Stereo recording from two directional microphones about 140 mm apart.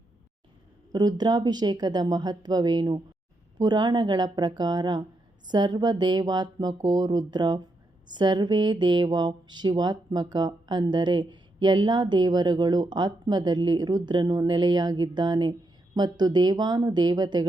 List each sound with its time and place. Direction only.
0.9 s speech: 30° right (ahead or behind)